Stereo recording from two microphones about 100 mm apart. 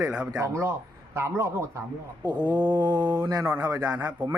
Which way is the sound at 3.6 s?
35° right (ahead or behind).